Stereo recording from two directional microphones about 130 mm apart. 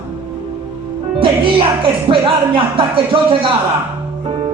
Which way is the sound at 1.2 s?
40° right (ahead or behind).